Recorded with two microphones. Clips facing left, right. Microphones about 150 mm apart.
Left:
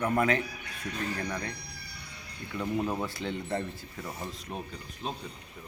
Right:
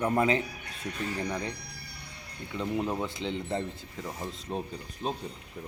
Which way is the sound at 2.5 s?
20° right (ahead or behind).